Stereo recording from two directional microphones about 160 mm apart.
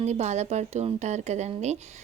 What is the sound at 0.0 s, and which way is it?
Speech, 45° right (ahead or behind).